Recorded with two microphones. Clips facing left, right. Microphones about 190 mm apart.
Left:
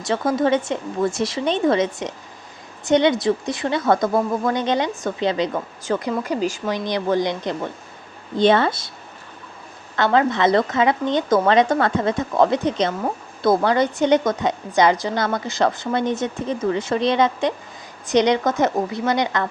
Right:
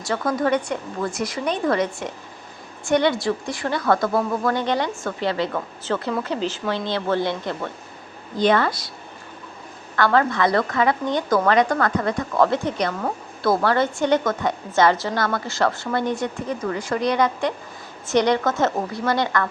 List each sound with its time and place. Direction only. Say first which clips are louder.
0.0 s speech: left 3 dB; 20° left (ahead or behind)
9.9 s speech: left 1 dB; 20° left (ahead or behind)